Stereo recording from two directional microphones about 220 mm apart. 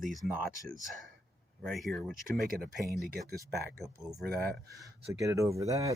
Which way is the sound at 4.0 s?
Centre (ahead or behind).